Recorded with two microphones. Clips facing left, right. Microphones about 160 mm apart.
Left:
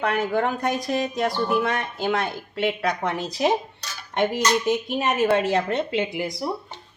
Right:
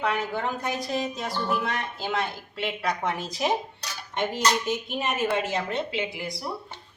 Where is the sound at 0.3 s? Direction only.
60° left (ahead or behind).